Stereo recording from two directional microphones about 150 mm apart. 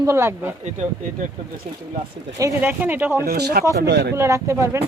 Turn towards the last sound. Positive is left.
turn(degrees=-20)  # may be behind; listen again after turning